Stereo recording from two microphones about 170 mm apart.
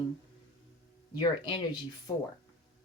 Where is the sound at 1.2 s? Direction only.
25° left (ahead or behind).